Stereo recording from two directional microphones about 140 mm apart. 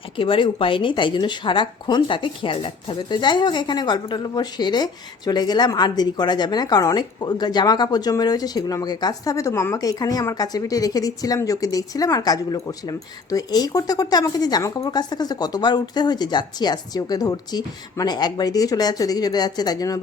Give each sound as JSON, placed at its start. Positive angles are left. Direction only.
{"t": 0.2, "sound": "speech", "side_deg": 35}